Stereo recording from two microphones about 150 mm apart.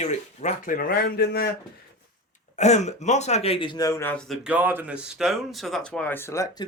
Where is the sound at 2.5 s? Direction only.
50° left (ahead or behind); by 4.3 s 10° left (ahead or behind).